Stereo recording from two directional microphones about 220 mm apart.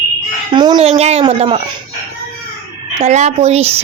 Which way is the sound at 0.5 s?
20° right (ahead or behind).